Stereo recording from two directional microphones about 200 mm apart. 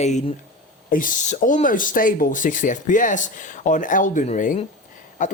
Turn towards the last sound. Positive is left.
turn(degrees=40)  # may be behind; listen again after turning